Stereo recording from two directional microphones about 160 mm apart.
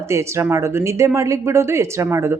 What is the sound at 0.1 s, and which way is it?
Speech, 15° right (ahead or behind).